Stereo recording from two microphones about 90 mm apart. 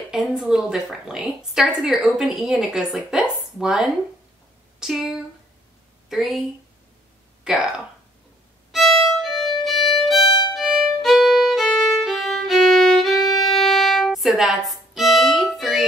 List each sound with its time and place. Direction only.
0.1 s a woman's voice: 5° right (ahead or behind)
7.4 s speech: 5° right (ahead or behind)
8.7 s violin: centre (ahead or behind)
10.2 s violin: 50° left (ahead or behind)
10.5 s violin: centre (ahead or behind)